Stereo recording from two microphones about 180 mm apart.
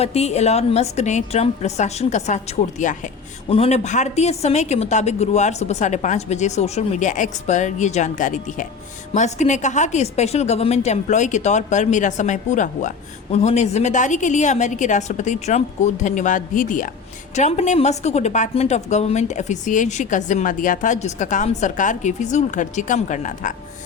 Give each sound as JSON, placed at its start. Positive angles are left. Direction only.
{"t": 0.0, "sound": "a woman's voice", "side_deg": 35}